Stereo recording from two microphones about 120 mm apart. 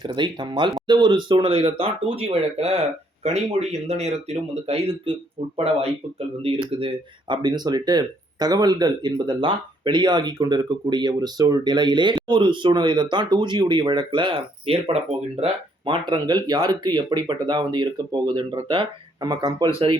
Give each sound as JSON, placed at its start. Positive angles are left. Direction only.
{"t": 0.0, "sound": "speech", "side_deg": -40}
{"t": 15.9, "sound": "speech", "side_deg": -40}